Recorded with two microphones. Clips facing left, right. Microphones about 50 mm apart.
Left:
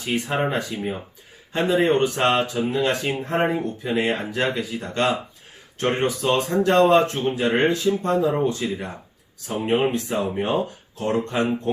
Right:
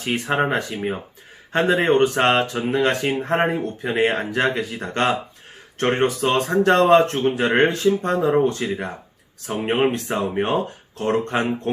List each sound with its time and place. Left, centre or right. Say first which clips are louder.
0.0 s speech: right 3 dB; right
1.5 s speech: right 2 dB; right